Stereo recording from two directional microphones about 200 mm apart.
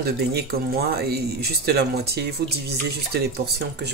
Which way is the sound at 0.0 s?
50° right (ahead or behind).